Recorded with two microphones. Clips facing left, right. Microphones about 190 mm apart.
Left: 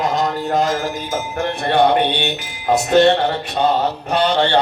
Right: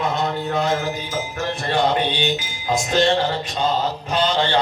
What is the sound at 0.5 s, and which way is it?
Music, 45° left (ahead or behind).